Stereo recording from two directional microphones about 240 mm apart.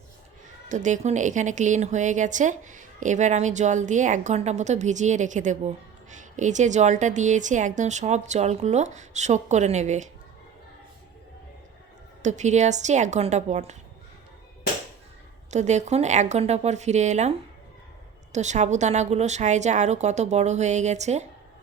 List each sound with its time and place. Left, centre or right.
0.7 s speech: right
12.2 s a woman's voice: right
15.4 s a woman's voice: right